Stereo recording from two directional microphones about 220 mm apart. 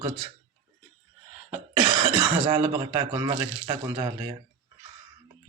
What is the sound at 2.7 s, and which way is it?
Speech, 20° right (ahead or behind).